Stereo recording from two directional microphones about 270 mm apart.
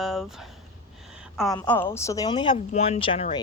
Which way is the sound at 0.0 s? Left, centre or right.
Centre.